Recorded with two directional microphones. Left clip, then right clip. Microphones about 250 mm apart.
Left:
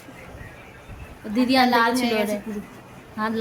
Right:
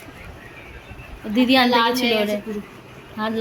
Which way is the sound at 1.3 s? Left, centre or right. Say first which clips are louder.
Right 2 dB; centre.